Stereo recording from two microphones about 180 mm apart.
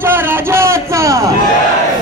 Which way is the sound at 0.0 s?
10° right (ahead or behind).